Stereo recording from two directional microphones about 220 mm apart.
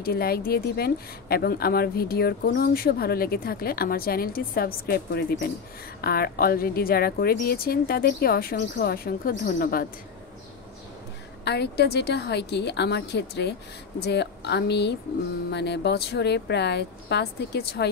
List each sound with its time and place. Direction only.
0.0 s a woman's voice: 45° left (ahead or behind)
11.4 s a woman's voice: 50° left (ahead or behind)